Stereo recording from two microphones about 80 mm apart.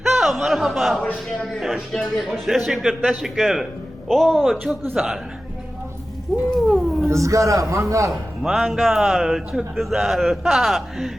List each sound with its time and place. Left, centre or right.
0.0 s a man's voice: centre
6.3 s a man's voice: centre
6.7 s cat: centre
7.1 s a man's voice: right
8.1 s a man's voice: centre